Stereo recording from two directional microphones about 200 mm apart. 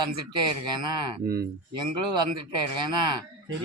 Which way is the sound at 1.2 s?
50° right (ahead or behind).